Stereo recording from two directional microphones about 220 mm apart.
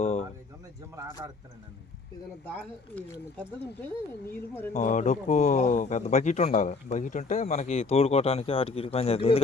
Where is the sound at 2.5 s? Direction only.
5° left (ahead or behind).